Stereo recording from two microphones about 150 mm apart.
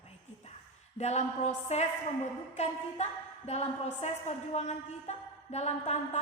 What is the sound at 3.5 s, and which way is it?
A woman's voice, 45° left (ahead or behind).